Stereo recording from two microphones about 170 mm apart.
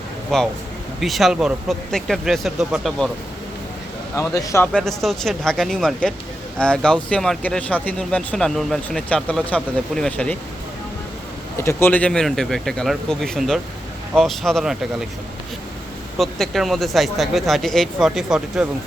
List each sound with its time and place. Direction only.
0.3 s speech: centre (ahead or behind)
4.1 s speech: 20° left (ahead or behind)
11.5 s speech: 15° left (ahead or behind); by 15.0 s centre (ahead or behind)
16.1 s speech: centre (ahead or behind)